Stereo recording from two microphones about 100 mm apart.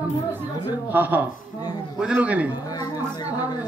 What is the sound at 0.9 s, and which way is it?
A man's voice, 20° right (ahead or behind).